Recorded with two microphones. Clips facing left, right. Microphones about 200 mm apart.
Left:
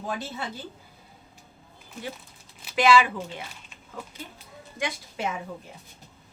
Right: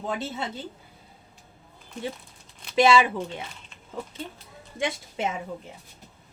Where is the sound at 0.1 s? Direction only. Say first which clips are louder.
Right 2 dB; 20° right (ahead or behind).